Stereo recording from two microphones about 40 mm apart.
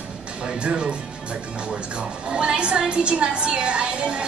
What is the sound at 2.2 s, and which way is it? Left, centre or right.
A woman's voice, right.